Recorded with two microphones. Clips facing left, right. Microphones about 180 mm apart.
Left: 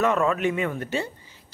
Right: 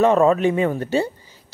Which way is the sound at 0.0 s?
30° right (ahead or behind).